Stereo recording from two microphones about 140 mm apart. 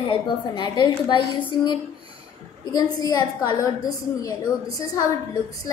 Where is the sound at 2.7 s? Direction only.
25° left (ahead or behind).